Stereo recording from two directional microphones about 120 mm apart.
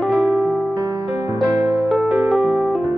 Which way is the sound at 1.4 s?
Centre (ahead or behind).